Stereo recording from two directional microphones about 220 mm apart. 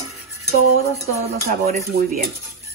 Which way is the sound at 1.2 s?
30° right (ahead or behind).